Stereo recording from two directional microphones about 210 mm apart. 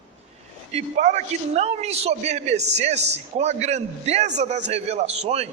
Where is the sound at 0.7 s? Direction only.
35° right (ahead or behind).